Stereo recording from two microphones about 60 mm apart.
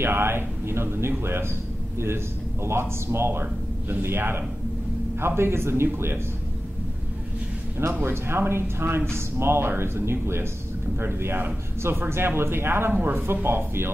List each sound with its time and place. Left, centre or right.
0.0 s speech: right
8.0 s speech: right